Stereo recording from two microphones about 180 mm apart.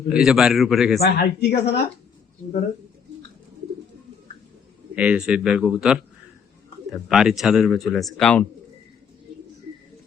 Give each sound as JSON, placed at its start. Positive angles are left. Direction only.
{"t": 0.1, "sound": "a man's voice", "side_deg": 0}
{"t": 0.9, "sound": "speech", "side_deg": 60}
{"t": 4.9, "sound": "a man's voice", "side_deg": -5}